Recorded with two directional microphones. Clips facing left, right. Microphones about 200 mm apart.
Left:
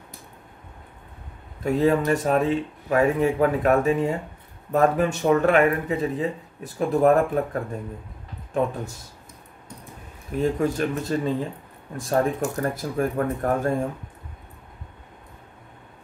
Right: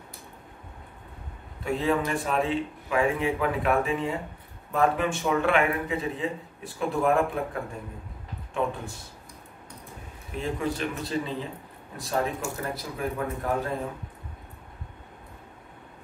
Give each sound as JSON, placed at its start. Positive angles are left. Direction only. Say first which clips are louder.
{"t": 1.6, "sound": "speech", "louder": "left 5 dB", "side_deg": 40}
{"t": 10.4, "sound": "speech", "louder": "left 6 dB", "side_deg": 45}